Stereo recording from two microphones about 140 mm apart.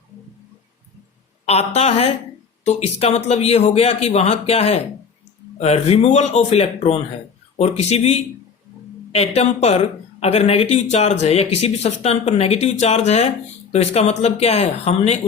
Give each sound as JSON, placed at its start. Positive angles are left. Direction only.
{"t": 1.5, "sound": "speech", "side_deg": 50}